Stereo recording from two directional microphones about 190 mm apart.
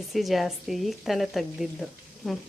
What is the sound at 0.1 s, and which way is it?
Speech, centre (ahead or behind).